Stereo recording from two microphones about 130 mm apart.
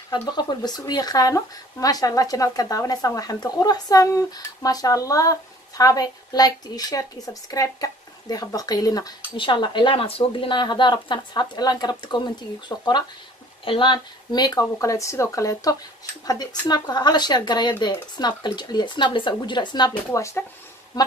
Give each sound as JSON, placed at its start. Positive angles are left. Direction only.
{"t": 0.2, "sound": "speech", "side_deg": 30}
{"t": 9.4, "sound": "a woman's voice", "side_deg": 40}
{"t": 20.1, "sound": "speech", "side_deg": 20}